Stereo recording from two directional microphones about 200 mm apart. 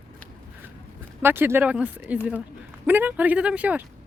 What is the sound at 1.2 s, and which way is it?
Speech, 10° right (ahead or behind).